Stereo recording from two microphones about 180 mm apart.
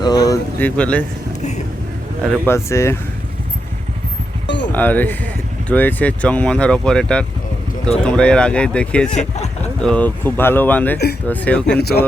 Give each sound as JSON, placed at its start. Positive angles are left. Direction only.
{"t": 0.0, "sound": "a sound", "side_deg": 20}
{"t": 0.6, "sound": "speech", "side_deg": 5}
{"t": 1.4, "sound": "a sound", "side_deg": 40}
{"t": 2.5, "sound": "speech", "side_deg": 15}
{"t": 4.4, "sound": "a sound", "side_deg": 75}
{"t": 4.7, "sound": "speech", "side_deg": 10}
{"t": 9.1, "sound": "speech", "side_deg": 40}
{"t": 9.8, "sound": "speech", "side_deg": 5}
{"t": 11.8, "sound": "speech", "side_deg": 60}